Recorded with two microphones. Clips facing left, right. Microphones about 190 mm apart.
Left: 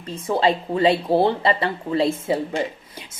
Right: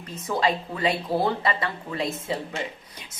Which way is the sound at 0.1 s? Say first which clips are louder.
Left 5 dB; 30° left (ahead or behind).